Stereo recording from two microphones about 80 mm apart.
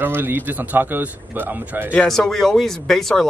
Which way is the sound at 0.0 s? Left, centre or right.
Right.